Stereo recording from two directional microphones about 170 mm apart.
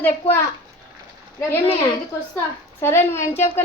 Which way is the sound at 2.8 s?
15° left (ahead or behind).